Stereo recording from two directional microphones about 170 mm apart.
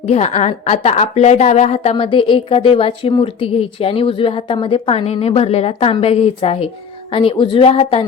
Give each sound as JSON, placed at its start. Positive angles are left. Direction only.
{"t": 0.0, "sound": "a woman's voice", "side_deg": 40}